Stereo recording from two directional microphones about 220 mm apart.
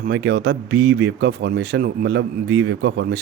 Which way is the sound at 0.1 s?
50° right (ahead or behind).